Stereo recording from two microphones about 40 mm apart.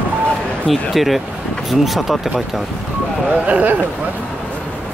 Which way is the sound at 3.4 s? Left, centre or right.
Right.